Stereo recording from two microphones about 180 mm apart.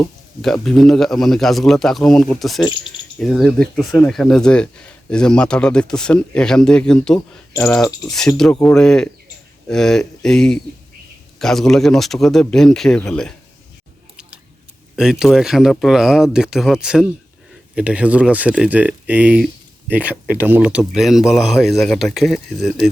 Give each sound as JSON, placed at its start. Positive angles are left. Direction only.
{"t": 0.4, "sound": "speech", "side_deg": 0}
{"t": 7.5, "sound": "speech", "side_deg": 15}
{"t": 8.0, "sound": "speech", "side_deg": 0}
{"t": 14.9, "sound": "speech", "side_deg": -5}